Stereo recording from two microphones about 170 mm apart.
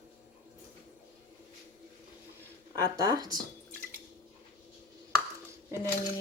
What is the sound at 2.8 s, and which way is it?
Speech, 20° right (ahead or behind).